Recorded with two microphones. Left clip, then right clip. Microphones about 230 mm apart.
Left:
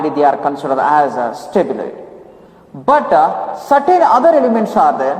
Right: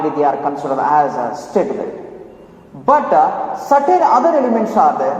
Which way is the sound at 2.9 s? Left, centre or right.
Left.